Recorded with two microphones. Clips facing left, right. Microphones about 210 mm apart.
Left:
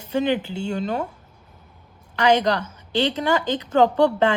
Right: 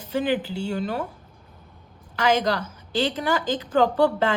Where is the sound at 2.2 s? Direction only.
25° left (ahead or behind).